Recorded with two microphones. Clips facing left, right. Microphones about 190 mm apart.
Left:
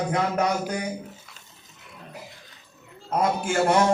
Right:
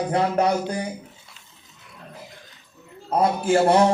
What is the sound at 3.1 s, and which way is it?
Speech, 35° right (ahead or behind).